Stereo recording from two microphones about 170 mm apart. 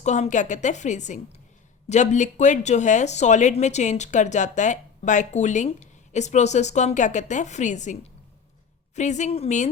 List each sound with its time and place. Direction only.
0.0 s speech: 45° left (ahead or behind)